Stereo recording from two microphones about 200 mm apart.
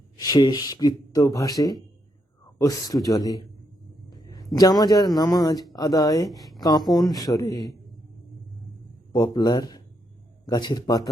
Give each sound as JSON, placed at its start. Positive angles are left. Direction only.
{"t": 0.2, "sound": "a man's voice", "side_deg": 20}
{"t": 6.2, "sound": "speech", "side_deg": 0}
{"t": 6.6, "sound": "speech", "side_deg": 20}
{"t": 9.1, "sound": "speech", "side_deg": 20}